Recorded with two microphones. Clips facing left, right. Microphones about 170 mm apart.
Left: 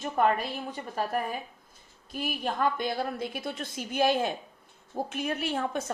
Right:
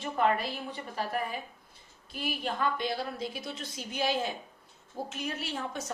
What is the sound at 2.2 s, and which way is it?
A woman's voice, 50° left (ahead or behind).